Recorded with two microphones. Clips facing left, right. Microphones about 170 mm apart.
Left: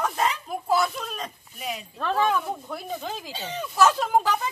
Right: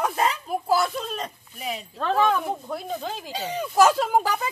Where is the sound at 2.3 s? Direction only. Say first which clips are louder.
Right 1 dB; 20° right (ahead or behind).